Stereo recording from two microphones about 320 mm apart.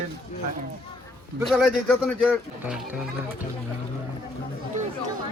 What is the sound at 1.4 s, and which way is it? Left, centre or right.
Speech, centre.